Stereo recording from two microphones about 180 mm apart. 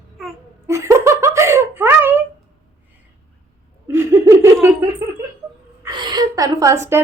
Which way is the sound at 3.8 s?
15° right (ahead or behind).